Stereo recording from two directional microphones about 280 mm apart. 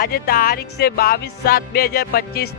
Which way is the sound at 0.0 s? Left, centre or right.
Left.